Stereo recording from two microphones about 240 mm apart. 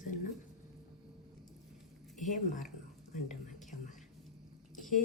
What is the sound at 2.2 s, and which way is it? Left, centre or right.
Speech, left.